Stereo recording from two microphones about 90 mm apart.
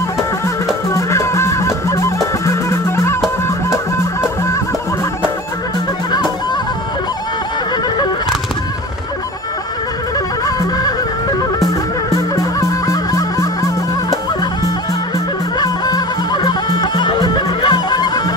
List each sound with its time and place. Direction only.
0.9 s music: 30° left (ahead or behind)
10.4 s music: 45° left (ahead or behind)
15.5 s music: 50° left (ahead or behind)